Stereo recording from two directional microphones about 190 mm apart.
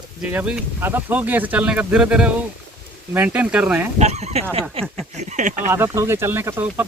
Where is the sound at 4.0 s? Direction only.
35° right (ahead or behind).